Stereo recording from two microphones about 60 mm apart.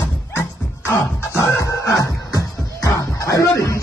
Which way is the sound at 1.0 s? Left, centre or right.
Left.